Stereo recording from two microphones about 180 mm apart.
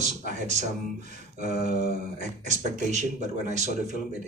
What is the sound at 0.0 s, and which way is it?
Speech, 40° right (ahead or behind).